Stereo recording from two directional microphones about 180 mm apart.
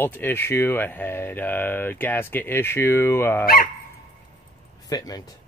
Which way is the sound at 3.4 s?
55° left (ahead or behind).